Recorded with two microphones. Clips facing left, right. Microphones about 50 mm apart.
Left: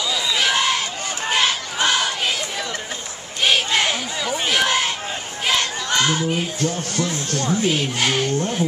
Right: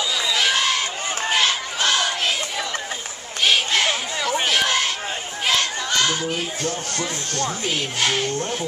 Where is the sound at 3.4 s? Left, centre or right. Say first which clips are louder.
Left 1 dB; centre.